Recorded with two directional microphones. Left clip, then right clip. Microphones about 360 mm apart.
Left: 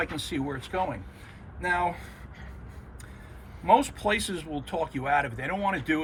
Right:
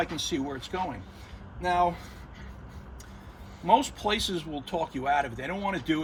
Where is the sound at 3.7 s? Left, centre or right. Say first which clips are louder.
Left 1 dB; centre.